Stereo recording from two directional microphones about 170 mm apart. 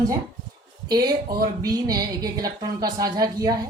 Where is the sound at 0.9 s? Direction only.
25° right (ahead or behind).